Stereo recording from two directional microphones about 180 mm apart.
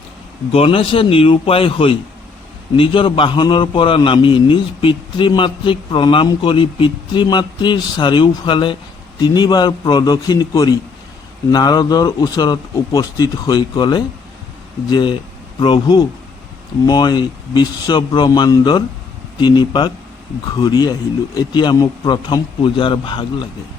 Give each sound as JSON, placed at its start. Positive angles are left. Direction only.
{"t": 0.5, "sound": "a man's voice", "side_deg": 35}